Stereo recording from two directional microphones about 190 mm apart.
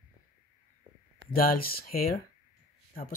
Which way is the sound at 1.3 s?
50° left (ahead or behind).